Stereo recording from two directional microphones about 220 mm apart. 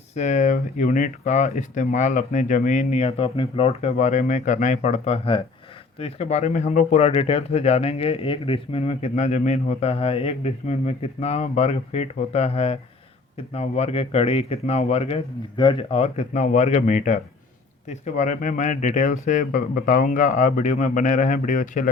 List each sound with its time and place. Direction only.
0.2 s speech: 35° left (ahead or behind)